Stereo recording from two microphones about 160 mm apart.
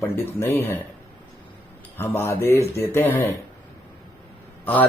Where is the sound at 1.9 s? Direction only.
15° left (ahead or behind).